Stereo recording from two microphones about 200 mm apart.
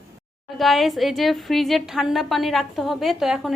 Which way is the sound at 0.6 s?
Centre (ahead or behind).